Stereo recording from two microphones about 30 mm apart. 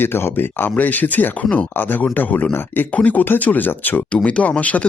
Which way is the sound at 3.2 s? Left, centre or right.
Left.